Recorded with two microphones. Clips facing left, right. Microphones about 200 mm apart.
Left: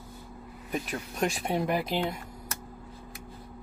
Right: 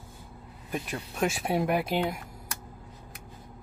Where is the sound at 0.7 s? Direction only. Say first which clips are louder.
Left 1 dB; centre (ahead or behind).